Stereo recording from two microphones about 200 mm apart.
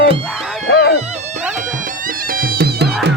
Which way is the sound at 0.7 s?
55° left (ahead or behind).